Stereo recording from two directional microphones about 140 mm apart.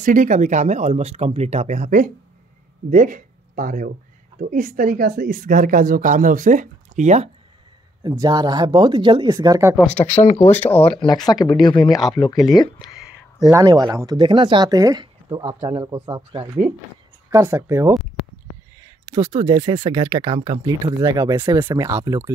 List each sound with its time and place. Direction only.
0.0 s speech: 65° right (ahead or behind)
8.0 s speech: 30° right (ahead or behind)
9.4 s speech: 20° right (ahead or behind)
9.8 s speech: 10° left (ahead or behind)
10.2 s speech: 55° left (ahead or behind)
10.5 s speech: 10° left (ahead or behind)
10.9 s speech: 40° left (ahead or behind)
12.8 s a sound: 5° right (ahead or behind)
13.5 s speech: 25° right (ahead or behind)
16.2 s speech: 40° right (ahead or behind)
17.3 s speech: 20° right (ahead or behind)
21.4 s speech: 15° right (ahead or behind)